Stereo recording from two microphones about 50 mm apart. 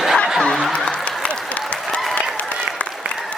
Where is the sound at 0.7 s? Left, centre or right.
Left.